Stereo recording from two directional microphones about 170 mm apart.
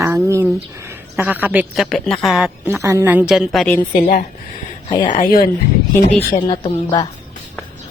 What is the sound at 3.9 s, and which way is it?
Speech, 55° left (ahead or behind).